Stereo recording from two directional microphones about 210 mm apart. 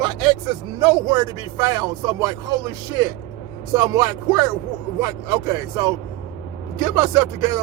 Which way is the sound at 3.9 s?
15° right (ahead or behind).